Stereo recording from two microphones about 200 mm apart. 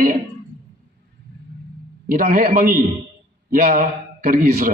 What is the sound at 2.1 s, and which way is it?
A man's voice, 45° right (ahead or behind).